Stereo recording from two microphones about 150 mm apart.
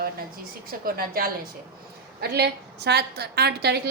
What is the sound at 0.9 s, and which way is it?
A woman's voice, 85° right.